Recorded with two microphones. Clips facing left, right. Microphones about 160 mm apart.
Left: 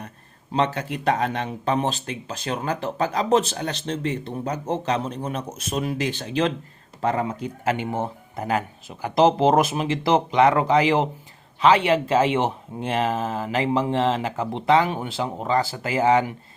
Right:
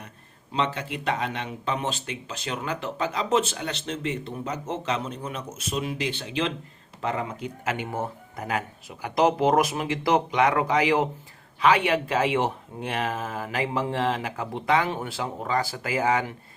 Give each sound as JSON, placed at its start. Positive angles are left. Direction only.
{"t": 0.5, "sound": "speech", "side_deg": 45}